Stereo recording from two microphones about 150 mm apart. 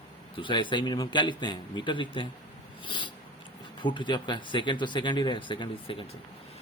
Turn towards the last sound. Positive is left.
turn(degrees=35)  # may be behind; listen again after turning